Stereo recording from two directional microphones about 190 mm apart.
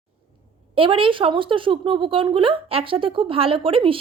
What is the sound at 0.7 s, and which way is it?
Speech, 25° right (ahead or behind).